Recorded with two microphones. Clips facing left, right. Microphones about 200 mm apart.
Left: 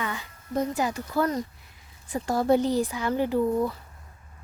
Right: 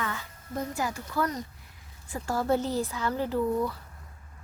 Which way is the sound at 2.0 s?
15° left (ahead or behind).